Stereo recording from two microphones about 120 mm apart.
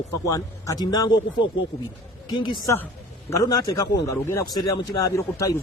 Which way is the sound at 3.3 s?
30° left (ahead or behind).